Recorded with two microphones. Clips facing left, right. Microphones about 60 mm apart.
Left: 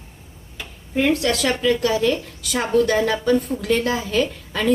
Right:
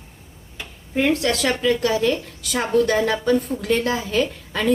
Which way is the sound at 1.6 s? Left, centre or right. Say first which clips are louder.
Left 1 dB; right.